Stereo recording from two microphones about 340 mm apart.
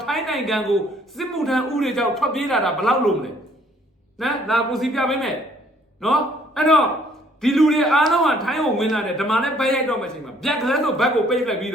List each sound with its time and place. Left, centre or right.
0.0 s a man's voice: centre